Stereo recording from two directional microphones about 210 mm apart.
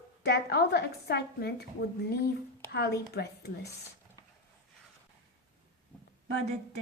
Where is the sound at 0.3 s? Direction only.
50° left (ahead or behind).